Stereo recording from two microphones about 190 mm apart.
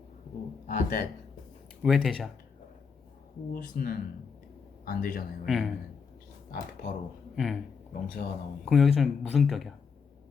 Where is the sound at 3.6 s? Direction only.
50° left (ahead or behind).